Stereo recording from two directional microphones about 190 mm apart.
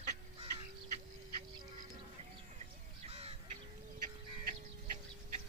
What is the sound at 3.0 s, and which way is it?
Crow, 30° right (ahead or behind).